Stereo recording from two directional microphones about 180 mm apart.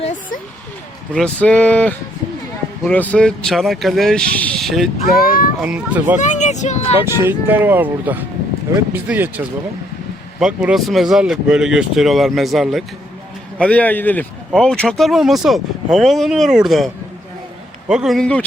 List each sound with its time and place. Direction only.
1.1 s speech: 5° left (ahead or behind)
5.2 s a child's voice: 55° left (ahead or behind)
5.5 s speech: 5° right (ahead or behind)
6.1 s speech: 40° left (ahead or behind)
7.2 s speech: 10° right (ahead or behind)
10.4 s speech: 5° right (ahead or behind)